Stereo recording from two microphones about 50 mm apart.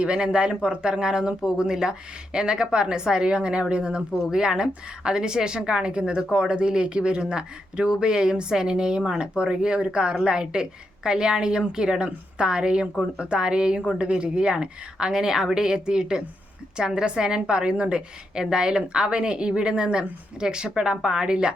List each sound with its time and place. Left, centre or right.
0.0 s speech: right